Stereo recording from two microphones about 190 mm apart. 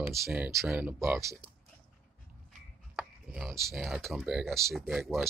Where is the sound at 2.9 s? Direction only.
Centre (ahead or behind).